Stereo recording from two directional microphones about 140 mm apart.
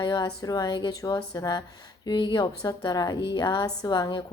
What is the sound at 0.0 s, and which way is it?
A woman's voice, 30° left (ahead or behind).